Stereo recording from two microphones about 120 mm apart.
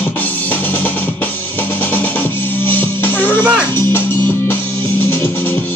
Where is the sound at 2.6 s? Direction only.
15° left (ahead or behind).